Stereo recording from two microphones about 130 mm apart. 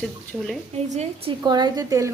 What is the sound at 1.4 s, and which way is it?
Speech, 35° right (ahead or behind).